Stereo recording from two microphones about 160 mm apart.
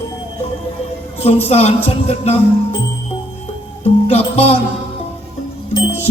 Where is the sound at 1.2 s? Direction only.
40° left (ahead or behind).